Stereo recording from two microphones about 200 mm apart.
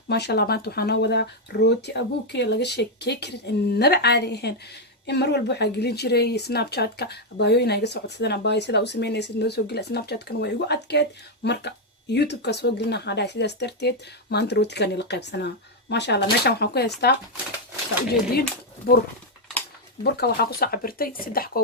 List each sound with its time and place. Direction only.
0.1 s speech: 55° left (ahead or behind)
18.9 s speech: 50° left (ahead or behind)
20.1 s speech: 55° left (ahead or behind)